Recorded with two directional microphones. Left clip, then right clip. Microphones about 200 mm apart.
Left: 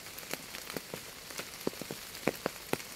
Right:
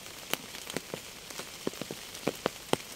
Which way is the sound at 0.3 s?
25° right (ahead or behind).